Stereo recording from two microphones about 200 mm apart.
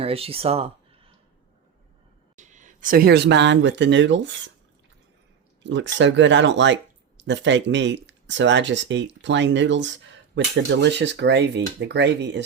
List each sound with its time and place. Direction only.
0.0 s speech: 30° right (ahead or behind)
2.3 s speech: 35° right (ahead or behind); by 4.5 s 65° right (ahead or behind)
5.6 s speech: 65° right (ahead or behind)